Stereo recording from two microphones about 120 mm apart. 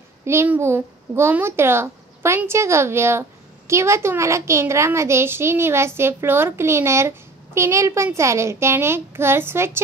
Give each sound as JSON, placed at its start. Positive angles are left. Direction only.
{"t": 0.2, "sound": "a child's voice", "side_deg": -20}